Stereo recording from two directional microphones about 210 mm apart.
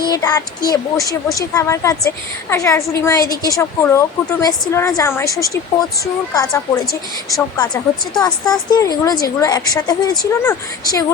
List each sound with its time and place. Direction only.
0.0 s a woman's voice: 20° left (ahead or behind)